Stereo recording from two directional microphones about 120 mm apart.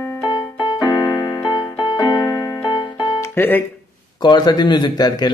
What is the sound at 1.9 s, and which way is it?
Music, 35° left (ahead or behind).